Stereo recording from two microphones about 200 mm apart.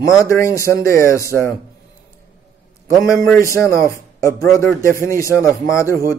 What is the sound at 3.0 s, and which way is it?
Speech, 15° left (ahead or behind).